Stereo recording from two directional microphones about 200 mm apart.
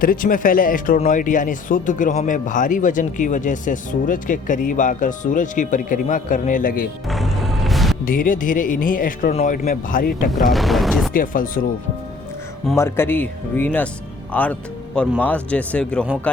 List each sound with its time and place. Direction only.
0.0 s speech: 45° left (ahead or behind)
7.1 s music: centre (ahead or behind)
8.0 s speech: 45° left (ahead or behind)
10.3 s speech: centre (ahead or behind)
11.1 s speech: 45° left (ahead or behind)
12.7 s a man's voice: 15° left (ahead or behind)